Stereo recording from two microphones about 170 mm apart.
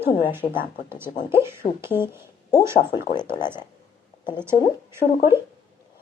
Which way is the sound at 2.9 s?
25° left (ahead or behind).